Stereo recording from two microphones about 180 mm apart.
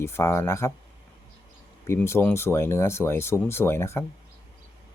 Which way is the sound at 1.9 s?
15° left (ahead or behind).